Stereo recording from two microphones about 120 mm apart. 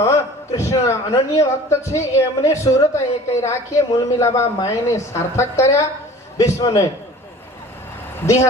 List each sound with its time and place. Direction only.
0.0 s a man's voice: 25° left (ahead or behind)